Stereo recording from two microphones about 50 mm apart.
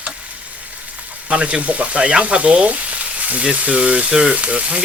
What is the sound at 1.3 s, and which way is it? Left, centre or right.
Speech, centre.